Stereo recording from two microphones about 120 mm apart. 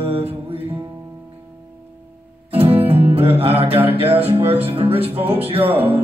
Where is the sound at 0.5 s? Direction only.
50° right (ahead or behind).